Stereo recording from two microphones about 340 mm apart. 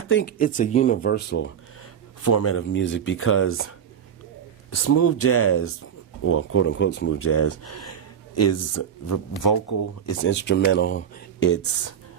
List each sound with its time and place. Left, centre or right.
0.1 s speech: left
2.2 s speech: left
4.7 s speech: left
9.4 s speech: left
10.2 s speech: left